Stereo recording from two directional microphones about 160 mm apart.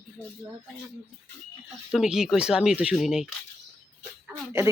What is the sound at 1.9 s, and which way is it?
Speech, 5° right (ahead or behind).